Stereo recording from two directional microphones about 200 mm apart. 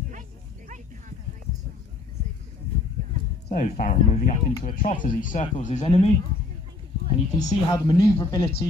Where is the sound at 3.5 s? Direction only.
40° left (ahead or behind).